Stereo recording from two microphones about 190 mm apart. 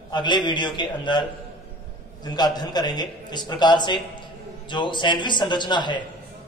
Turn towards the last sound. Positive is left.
turn(degrees=25)  # may be behind; listen again after turning